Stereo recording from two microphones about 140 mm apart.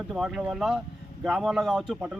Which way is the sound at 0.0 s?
5° right (ahead or behind).